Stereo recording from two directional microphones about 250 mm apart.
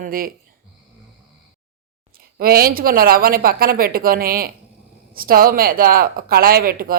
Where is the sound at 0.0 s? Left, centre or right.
Right.